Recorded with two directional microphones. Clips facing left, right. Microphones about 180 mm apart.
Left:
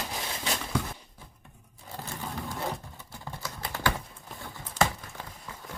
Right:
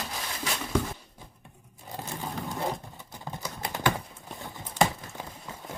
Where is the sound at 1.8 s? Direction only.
15° right (ahead or behind).